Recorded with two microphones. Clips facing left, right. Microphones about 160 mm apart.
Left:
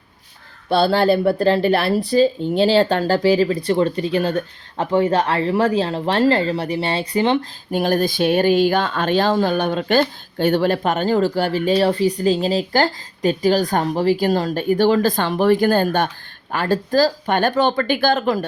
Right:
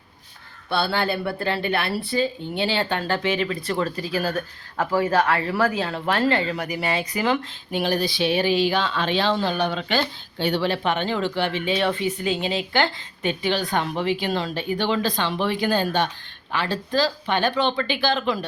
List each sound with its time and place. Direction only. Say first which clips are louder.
0.8 s speech: left 8 dB; 40° left (ahead or behind)
7.7 s speech: left 5 dB; 45° left (ahead or behind)